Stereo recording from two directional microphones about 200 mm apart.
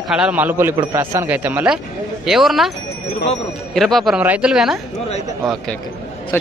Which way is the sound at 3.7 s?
Centre (ahead or behind).